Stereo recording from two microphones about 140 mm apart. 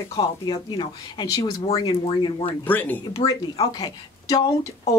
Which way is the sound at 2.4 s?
10° left (ahead or behind).